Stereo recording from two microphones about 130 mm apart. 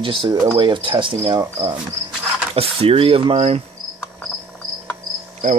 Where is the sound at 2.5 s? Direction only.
45° right (ahead or behind).